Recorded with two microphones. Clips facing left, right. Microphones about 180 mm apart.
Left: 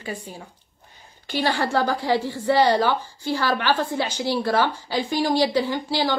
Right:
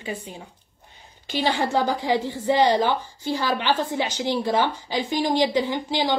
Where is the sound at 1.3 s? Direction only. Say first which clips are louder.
Even; 20° right (ahead or behind).